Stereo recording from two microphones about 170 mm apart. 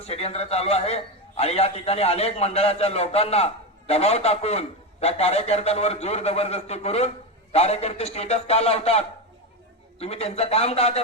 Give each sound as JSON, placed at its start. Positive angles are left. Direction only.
{"t": 0.0, "sound": "a man's voice", "side_deg": 40}